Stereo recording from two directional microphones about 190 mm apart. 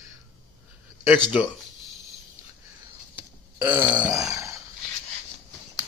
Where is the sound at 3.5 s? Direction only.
25° right (ahead or behind).